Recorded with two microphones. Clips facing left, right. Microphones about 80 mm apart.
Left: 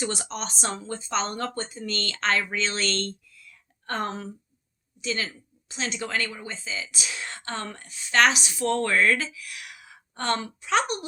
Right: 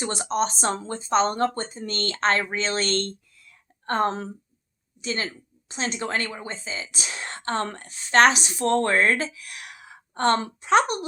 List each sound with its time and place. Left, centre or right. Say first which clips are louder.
0.0 s speech: right 6 dB; right